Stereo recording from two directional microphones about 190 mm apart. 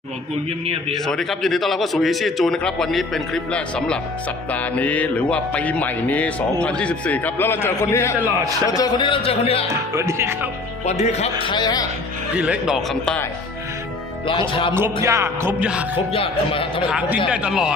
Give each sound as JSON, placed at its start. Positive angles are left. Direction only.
{"t": 1.0, "sound": "a man's voice", "side_deg": 0}
{"t": 4.5, "sound": "music", "side_deg": 10}
{"t": 8.7, "sound": "speech", "side_deg": 20}
{"t": 9.9, "sound": "music", "side_deg": -15}
{"t": 11.0, "sound": "speech", "side_deg": 35}
{"t": 12.4, "sound": "a man's voice", "side_deg": -5}
{"t": 14.3, "sound": "speech", "side_deg": 25}
{"t": 15.0, "sound": "music", "side_deg": -15}
{"t": 16.1, "sound": "speech", "side_deg": 30}
{"t": 17.2, "sound": "a man's voice", "side_deg": -5}